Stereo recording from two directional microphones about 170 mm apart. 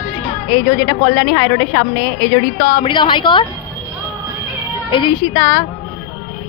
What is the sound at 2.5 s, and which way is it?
Speech, 60° left (ahead or behind).